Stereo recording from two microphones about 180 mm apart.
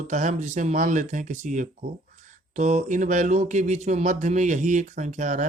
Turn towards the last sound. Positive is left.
turn(degrees=-45)  # may be behind; listen again after turning